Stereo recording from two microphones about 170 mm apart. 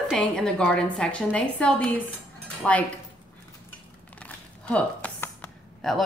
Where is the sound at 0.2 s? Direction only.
5° left (ahead or behind).